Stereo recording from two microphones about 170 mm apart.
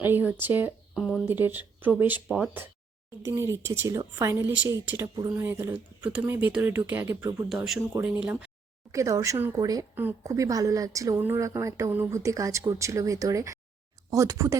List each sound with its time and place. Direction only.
0.0 s speech: 10° right (ahead or behind)
7.5 s speech: centre (ahead or behind)
8.9 s speech: 20° right (ahead or behind)